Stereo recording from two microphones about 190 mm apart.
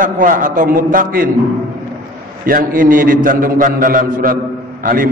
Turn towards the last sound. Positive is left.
turn(degrees=-45)  # may be behind; listen again after turning